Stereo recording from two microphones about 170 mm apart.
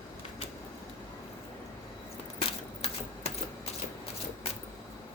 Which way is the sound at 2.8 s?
40° left (ahead or behind).